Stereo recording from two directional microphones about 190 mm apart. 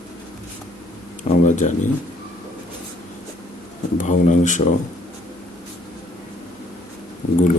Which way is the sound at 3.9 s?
40° left (ahead or behind).